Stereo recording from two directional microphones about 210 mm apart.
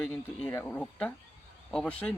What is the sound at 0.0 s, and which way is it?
A man's voice, 5° left (ahead or behind).